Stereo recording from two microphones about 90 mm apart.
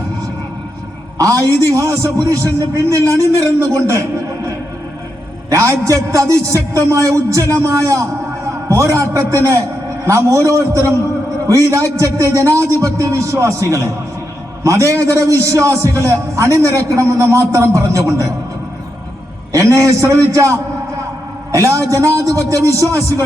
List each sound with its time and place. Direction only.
1.2 s a man's voice: 40° right (ahead or behind)
5.5 s a man's voice: 35° right (ahead or behind)
19.5 s a man's voice: 35° right (ahead or behind)